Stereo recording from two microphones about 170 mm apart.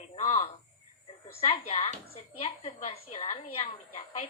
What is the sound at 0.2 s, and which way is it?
Cricket, 45° left (ahead or behind).